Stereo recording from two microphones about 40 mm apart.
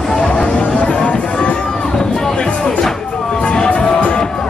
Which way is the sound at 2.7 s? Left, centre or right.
Centre.